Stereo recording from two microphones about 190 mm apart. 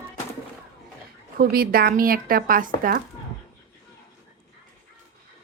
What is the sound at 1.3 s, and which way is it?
A woman's voice, 55° right (ahead or behind).